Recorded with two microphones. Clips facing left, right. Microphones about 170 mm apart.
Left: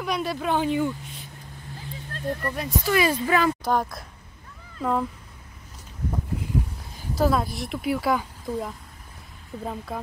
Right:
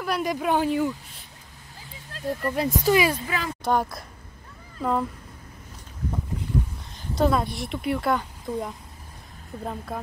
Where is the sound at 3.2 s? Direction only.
55° left (ahead or behind).